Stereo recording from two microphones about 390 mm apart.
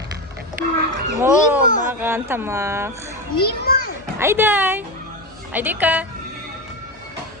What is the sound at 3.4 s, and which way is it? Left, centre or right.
Speech, left.